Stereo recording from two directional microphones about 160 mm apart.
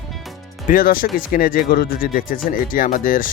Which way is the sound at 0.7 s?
60° left (ahead or behind).